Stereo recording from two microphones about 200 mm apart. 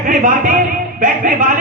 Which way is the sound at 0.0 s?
45° right (ahead or behind).